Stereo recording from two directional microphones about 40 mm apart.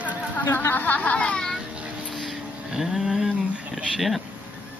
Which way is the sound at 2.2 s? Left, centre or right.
Centre.